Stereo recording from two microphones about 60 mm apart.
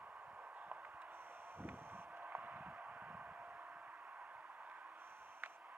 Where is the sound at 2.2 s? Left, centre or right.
Right.